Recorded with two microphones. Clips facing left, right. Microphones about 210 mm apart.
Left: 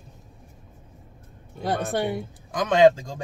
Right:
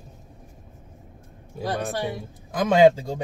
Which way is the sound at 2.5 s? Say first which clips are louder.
Right 1 dB; 10° right (ahead or behind).